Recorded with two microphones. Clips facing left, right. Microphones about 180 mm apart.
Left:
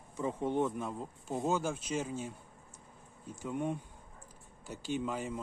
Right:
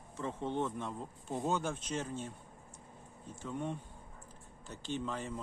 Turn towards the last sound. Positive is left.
turn(degrees=10)  # may be behind; listen again after turning